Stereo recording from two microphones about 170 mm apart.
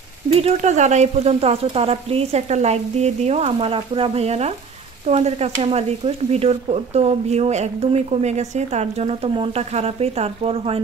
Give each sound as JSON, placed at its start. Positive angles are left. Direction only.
{"t": 0.4, "sound": "speech", "side_deg": -40}